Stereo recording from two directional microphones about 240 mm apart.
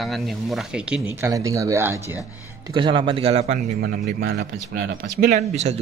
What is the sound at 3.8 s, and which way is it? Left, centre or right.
Speech, right.